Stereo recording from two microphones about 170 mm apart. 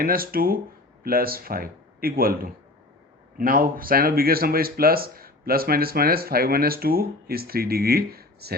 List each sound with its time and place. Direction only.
0.0 s speech: 60° right (ahead or behind)